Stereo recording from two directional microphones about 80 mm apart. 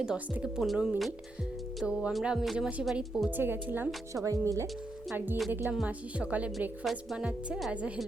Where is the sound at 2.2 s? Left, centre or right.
Centre.